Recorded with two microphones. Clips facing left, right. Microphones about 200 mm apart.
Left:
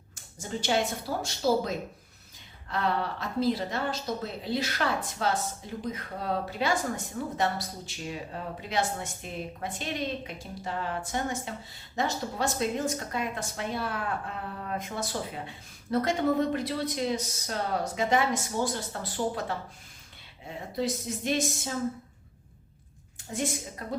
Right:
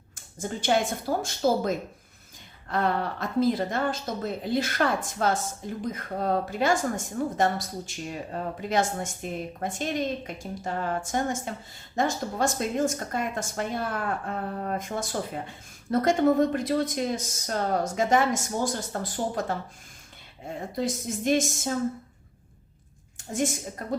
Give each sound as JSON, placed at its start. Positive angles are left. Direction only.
{"t": 0.3, "sound": "a woman's voice", "side_deg": -50}
{"t": 20.6, "sound": "a woman's voice", "side_deg": -50}
{"t": 23.1, "sound": "a woman's voice", "side_deg": -45}